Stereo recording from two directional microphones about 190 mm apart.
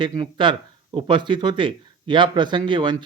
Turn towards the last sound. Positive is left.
turn(degrees=-25)  # may be behind; listen again after turning